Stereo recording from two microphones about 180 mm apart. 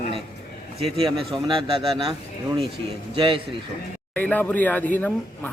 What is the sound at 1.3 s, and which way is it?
Speech, 30° right (ahead or behind).